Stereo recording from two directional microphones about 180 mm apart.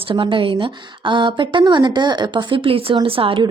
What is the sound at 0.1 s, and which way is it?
Speech, 30° right (ahead or behind).